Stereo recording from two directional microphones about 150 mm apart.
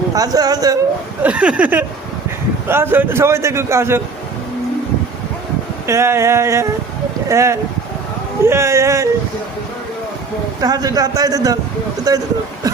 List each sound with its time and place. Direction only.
0.1 s a man's voice: 25° right (ahead or behind)
1.2 s a man's voice: 10° right (ahead or behind)
5.8 s a man's voice: 15° right (ahead or behind)
10.6 s a man's voice: 25° right (ahead or behind)
12.6 s throat clearing: 25° right (ahead or behind)